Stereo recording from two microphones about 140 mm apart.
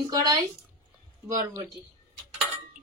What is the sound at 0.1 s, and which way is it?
Speech, 30° right (ahead or behind).